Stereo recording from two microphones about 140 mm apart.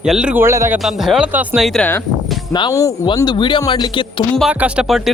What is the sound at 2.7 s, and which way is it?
Speech, 20° left (ahead or behind).